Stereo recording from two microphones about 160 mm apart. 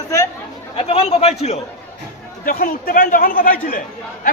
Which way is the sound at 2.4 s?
65° left (ahead or behind).